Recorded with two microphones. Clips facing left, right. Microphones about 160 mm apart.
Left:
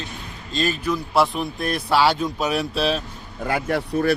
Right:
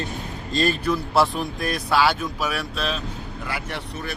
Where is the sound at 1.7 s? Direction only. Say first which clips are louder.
Left 2 dB; 25° left (ahead or behind).